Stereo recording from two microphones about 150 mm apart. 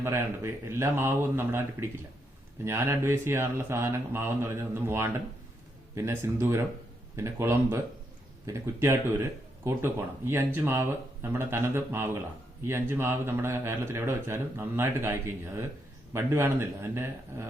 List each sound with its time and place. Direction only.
0.0 s speech: 15° right (ahead or behind)